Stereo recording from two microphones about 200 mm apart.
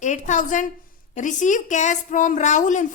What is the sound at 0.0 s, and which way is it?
A woman's voice, 35° left (ahead or behind).